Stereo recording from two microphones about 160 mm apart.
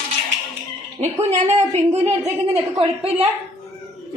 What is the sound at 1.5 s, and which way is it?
Speech, 15° right (ahead or behind).